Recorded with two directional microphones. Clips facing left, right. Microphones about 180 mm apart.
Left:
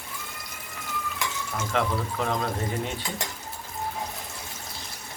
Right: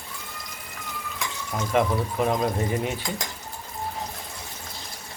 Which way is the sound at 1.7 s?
15° right (ahead or behind).